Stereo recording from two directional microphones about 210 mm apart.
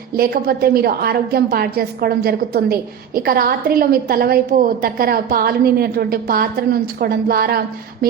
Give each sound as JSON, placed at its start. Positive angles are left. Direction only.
{"t": 0.2, "sound": "a woman's voice", "side_deg": -45}